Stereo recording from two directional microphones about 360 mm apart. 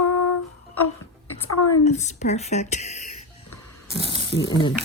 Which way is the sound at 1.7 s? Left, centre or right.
Centre.